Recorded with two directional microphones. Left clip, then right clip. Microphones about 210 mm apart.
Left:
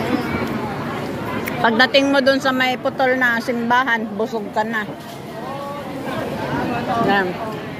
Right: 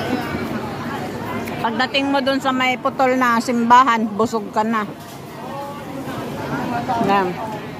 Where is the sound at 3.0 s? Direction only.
20° right (ahead or behind).